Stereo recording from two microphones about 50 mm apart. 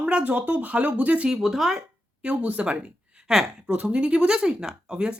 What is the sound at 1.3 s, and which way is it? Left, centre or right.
Speech, centre.